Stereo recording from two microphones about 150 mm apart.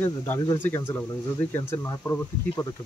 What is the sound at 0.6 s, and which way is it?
Speech, 15° left (ahead or behind).